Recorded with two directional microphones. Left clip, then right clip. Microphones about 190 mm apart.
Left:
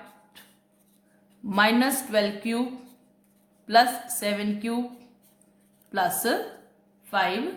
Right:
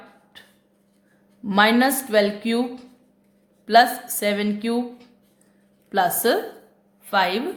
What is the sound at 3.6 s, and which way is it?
Speech, 30° right (ahead or behind).